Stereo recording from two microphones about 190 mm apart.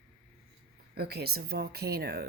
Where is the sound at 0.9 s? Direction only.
55° right (ahead or behind).